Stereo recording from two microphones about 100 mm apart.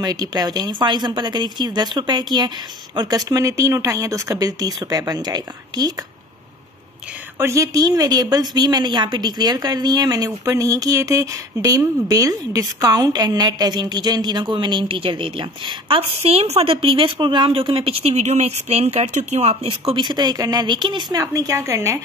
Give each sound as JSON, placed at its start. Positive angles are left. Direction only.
{"t": 0.0, "sound": "a woman's voice", "side_deg": -40}
{"t": 7.3, "sound": "a woman's voice", "side_deg": -30}
{"t": 20.0, "sound": "speech", "side_deg": -45}